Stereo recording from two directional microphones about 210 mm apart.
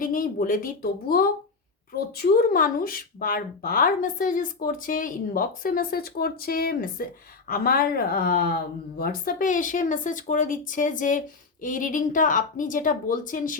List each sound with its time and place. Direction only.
0.0 s a woman's voice: 45° left (ahead or behind)